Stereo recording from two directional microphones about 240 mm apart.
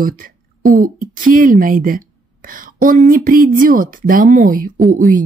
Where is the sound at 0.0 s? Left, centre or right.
Right.